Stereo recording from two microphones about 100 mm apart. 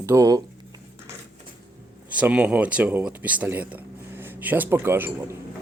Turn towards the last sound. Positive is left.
turn(degrees=-20)  # may be behind; listen again after turning